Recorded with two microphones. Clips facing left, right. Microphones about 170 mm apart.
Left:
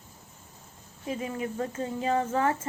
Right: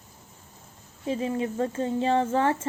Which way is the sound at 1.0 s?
30° right (ahead or behind).